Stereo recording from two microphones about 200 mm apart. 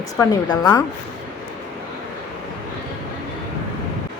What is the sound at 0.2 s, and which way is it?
Speech, 20° left (ahead or behind).